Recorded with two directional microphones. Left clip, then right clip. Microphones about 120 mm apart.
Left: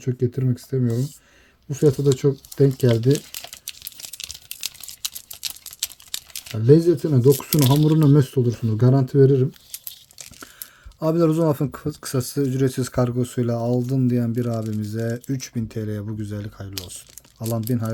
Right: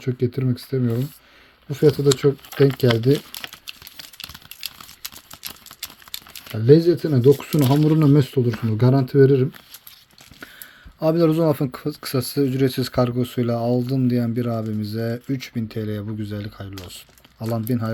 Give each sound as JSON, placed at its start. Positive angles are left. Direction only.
{"t": 0.0, "sound": "speech", "side_deg": 30}
{"t": 6.6, "sound": "speech", "side_deg": 35}
{"t": 11.0, "sound": "speech", "side_deg": 30}